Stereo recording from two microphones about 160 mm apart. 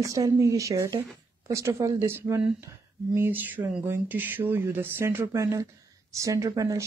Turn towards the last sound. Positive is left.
turn(degrees=-20)  # may be behind; listen again after turning